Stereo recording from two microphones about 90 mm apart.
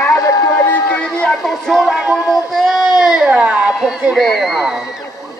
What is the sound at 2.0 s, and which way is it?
Speech, 20° right (ahead or behind).